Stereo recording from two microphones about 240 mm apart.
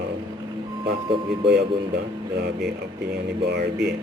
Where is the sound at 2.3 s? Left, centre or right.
Right.